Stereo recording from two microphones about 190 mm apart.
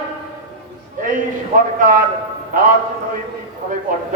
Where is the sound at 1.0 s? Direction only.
45° right (ahead or behind).